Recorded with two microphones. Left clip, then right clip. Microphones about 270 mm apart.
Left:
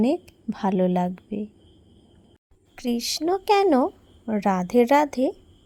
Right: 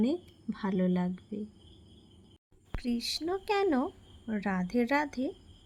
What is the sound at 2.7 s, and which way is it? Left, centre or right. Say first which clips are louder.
Speech: left 7 dB; left.